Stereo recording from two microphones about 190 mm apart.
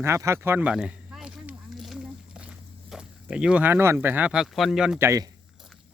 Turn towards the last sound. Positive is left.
turn(degrees=-15)  # may be behind; listen again after turning